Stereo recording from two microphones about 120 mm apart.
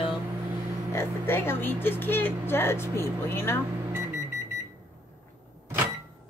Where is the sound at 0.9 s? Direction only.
20° left (ahead or behind).